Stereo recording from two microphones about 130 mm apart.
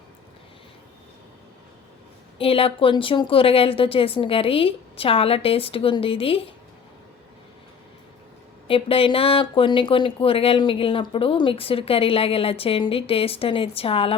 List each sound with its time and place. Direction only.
2.4 s speech: 45° left (ahead or behind)
8.6 s speech: 45° left (ahead or behind)